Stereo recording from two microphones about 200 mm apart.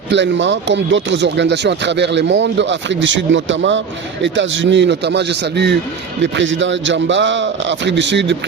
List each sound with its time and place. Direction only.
0.1 s speech: 65° right (ahead or behind)